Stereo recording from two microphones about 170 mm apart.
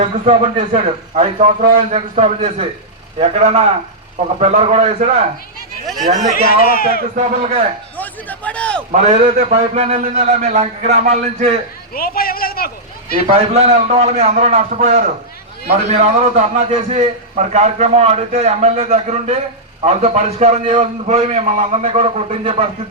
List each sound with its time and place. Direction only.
0.0 s a man's voice: 40° right (ahead or behind)
5.8 s speech: centre (ahead or behind)
6.3 s speech: 60° left (ahead or behind)
7.2 s a man's voice: 40° right (ahead or behind)
7.9 s a man's voice: 10° left (ahead or behind)
8.9 s a man's voice: 40° right (ahead or behind)
11.9 s speech: 60° left (ahead or behind)
13.3 s a man's voice: 40° right (ahead or behind)